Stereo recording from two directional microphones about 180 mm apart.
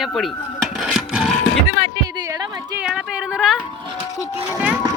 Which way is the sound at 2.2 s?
20° right (ahead or behind).